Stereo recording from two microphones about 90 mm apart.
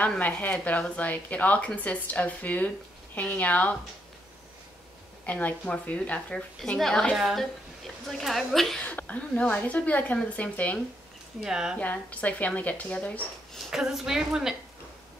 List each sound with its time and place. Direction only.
0.2 s speech: 15° left (ahead or behind)
5.2 s a woman's voice: 15° left (ahead or behind)
8.8 s a woman's voice: 15° left (ahead or behind)
11.4 s speech: 5° right (ahead or behind)
11.8 s speech: 15° left (ahead or behind)
13.7 s a woman's voice: 5° right (ahead or behind)